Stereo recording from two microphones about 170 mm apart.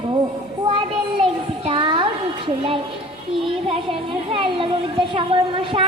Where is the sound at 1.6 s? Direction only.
30° right (ahead or behind).